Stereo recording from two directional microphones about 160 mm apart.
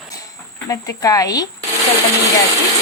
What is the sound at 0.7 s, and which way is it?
Speech, 20° left (ahead or behind).